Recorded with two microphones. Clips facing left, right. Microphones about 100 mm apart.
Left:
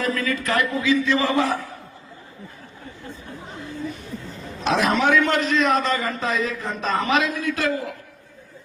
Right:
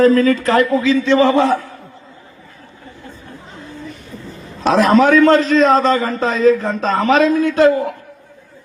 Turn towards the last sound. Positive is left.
turn(degrees=-25)  # may be behind; listen again after turning